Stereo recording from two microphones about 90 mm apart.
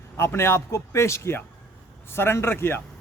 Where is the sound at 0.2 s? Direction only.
30° left (ahead or behind).